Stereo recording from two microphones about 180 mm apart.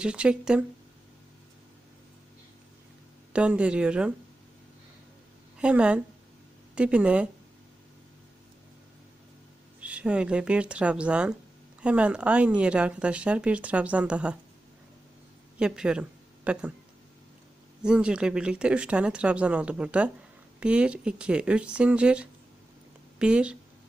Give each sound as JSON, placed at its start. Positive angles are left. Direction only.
{"t": 0.0, "sound": "speech", "side_deg": -5}
{"t": 3.3, "sound": "speech", "side_deg": -5}
{"t": 5.5, "sound": "a woman's voice", "side_deg": -5}
{"t": 9.8, "sound": "speech", "side_deg": -5}
{"t": 15.5, "sound": "speech", "side_deg": -5}
{"t": 17.8, "sound": "speech", "side_deg": -5}